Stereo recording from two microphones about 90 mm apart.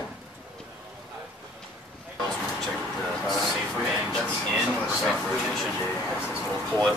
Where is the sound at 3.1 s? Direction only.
Centre (ahead or behind).